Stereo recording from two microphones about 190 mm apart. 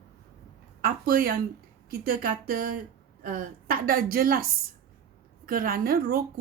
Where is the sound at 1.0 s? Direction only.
50° right (ahead or behind).